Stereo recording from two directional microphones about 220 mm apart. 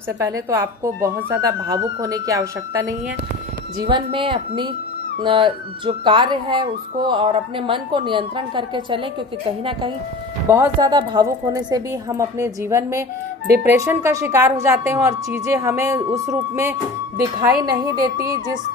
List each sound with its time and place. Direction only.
0.2 s a woman's voice: 15° right (ahead or behind)